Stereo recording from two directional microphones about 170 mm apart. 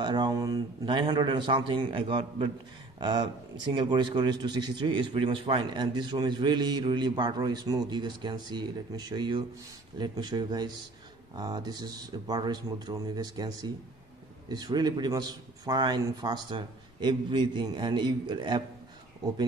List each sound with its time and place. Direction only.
0.0 s speech: 25° right (ahead or behind)